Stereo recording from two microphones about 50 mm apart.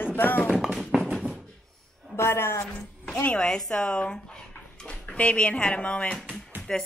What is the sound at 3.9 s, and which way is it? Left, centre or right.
Dog, centre.